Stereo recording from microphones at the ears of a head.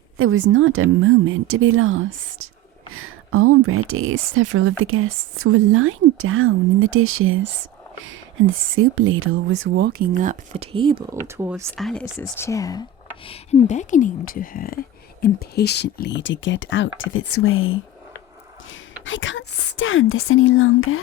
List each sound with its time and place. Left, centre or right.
0.2 s speech: right
12.5 s speech: left